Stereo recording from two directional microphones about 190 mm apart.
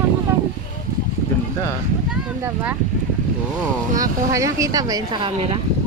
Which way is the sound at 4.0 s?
15° right (ahead or behind).